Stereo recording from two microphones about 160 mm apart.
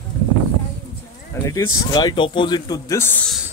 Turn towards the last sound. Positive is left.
turn(degrees=10)  # may be behind; listen again after turning